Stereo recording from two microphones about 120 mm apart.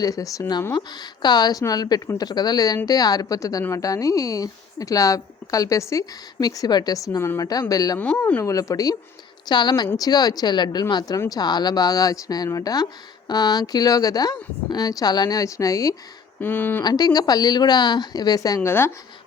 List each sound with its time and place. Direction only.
0.0 s speech: 30° left (ahead or behind)
7.9 s speech: 15° left (ahead or behind)
16.4 s speech: 15° left (ahead or behind)
16.8 s speech: 35° left (ahead or behind)